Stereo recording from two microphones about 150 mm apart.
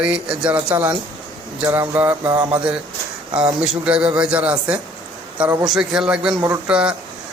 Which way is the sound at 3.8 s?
5° right (ahead or behind).